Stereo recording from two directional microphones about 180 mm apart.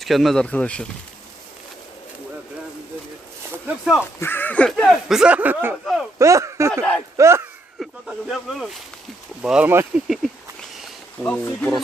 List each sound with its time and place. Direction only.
0.0 s speech: centre (ahead or behind)
3.5 s a sound: 5° right (ahead or behind)
4.2 s speech: 10° left (ahead or behind)
6.1 s speech: 15° right (ahead or behind)
7.8 s snake: centre (ahead or behind)
9.4 s speech: 5° right (ahead or behind)
11.2 s speech: 10° left (ahead or behind)